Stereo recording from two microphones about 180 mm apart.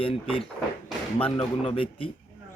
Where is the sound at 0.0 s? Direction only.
30° left (ahead or behind).